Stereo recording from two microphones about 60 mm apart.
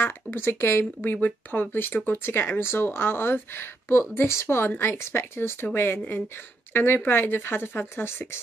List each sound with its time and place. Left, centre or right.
0.0 s speech: left